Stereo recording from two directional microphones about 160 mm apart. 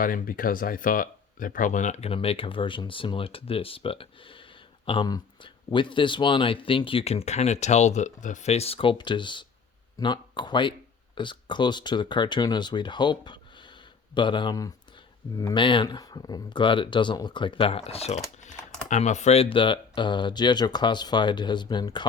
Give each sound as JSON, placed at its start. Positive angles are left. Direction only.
{"t": 0.0, "sound": "speech", "side_deg": 60}